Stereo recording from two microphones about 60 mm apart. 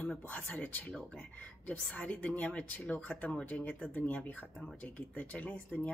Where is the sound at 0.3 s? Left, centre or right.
Left.